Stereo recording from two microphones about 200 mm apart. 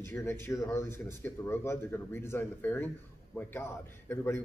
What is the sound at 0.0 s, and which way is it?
A man's voice, 10° left (ahead or behind).